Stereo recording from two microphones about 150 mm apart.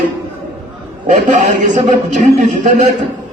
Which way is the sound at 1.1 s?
55° right (ahead or behind).